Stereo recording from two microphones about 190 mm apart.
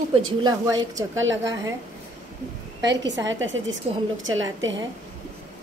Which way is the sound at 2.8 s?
70° right (ahead or behind).